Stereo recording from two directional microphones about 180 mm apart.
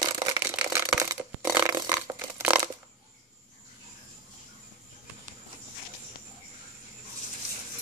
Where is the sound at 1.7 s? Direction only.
20° right (ahead or behind).